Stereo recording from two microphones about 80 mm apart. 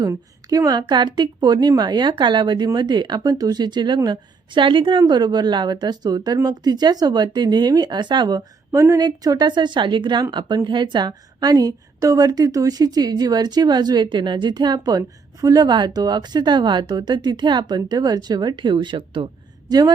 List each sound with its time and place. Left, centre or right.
0.0 s a woman's voice: right
8.7 s a woman's voice: right
9.0 s a woman's voice: right
9.5 s a woman's voice: right